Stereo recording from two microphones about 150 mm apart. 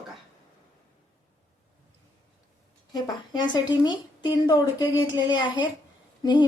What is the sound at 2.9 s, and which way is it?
Speech, 30° left (ahead or behind).